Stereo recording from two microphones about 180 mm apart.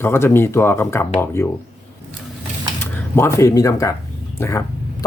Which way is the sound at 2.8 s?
15° left (ahead or behind).